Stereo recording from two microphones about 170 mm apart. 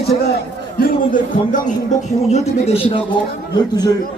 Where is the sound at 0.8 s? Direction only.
55° left (ahead or behind).